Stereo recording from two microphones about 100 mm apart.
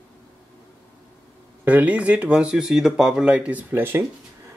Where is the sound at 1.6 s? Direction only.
15° right (ahead or behind).